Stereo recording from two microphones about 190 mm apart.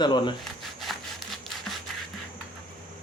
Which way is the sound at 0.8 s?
Centre (ahead or behind).